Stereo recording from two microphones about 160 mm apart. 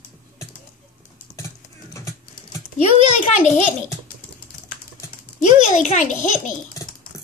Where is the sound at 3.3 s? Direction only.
45° left (ahead or behind).